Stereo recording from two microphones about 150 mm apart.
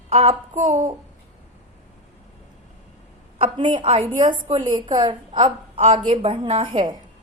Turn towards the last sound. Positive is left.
turn(degrees=-35)  # may be behind; listen again after turning